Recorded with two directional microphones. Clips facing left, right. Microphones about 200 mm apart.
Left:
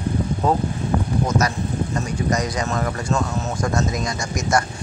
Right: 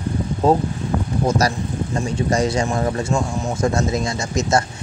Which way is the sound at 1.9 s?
30° right (ahead or behind).